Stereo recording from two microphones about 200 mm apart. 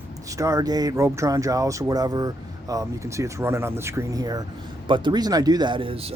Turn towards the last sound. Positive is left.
turn(degrees=-30)  # may be behind; listen again after turning